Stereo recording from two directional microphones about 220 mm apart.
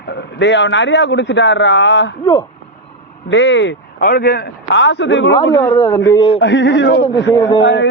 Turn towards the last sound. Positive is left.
turn(degrees=55)  # may be behind; listen again after turning